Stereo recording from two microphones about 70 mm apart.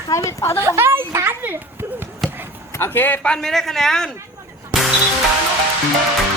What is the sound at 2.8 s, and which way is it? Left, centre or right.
Speech, left.